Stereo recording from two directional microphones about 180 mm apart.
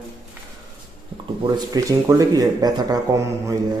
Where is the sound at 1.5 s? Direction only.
20° right (ahead or behind).